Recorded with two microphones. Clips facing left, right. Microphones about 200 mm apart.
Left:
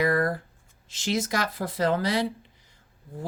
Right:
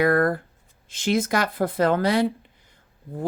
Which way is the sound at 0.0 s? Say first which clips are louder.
Right 4 dB; 55° right (ahead or behind).